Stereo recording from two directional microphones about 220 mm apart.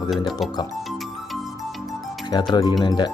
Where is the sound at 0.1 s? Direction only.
Centre (ahead or behind).